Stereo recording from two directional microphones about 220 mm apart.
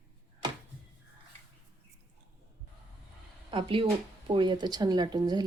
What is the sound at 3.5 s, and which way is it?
Speech, 25° right (ahead or behind).